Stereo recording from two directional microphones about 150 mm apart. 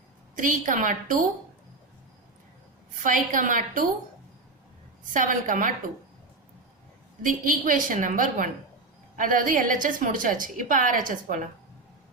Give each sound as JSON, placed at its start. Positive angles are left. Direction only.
{"t": 0.3, "sound": "a woman's voice", "side_deg": -60}
{"t": 3.0, "sound": "a woman's voice", "side_deg": -60}
{"t": 5.1, "sound": "a woman's voice", "side_deg": -60}
{"t": 7.2, "sound": "a woman's voice", "side_deg": -65}